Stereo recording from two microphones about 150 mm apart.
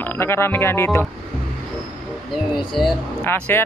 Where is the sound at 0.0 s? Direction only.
15° left (ahead or behind).